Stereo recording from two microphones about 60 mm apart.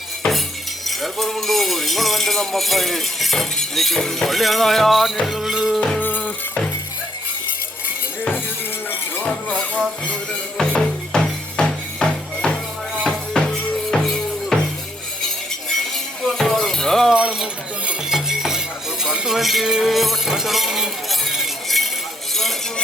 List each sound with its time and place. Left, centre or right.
0.2 s music: centre
0.9 s a sound: centre
5.2 s music: centre
6.0 s music: left
9.2 s speech: centre
10.6 s music: centre
16.2 s music: centre
17.1 s a sound: centre
18.1 s music: centre
19.4 s music: centre